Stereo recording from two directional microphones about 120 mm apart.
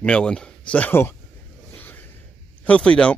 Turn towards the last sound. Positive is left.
turn(degrees=10)  # may be behind; listen again after turning